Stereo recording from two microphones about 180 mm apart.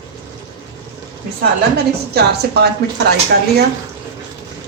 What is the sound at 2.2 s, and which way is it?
Speech, 65° right (ahead or behind).